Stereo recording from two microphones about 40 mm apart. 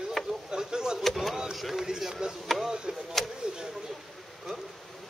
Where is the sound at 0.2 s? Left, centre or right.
Centre.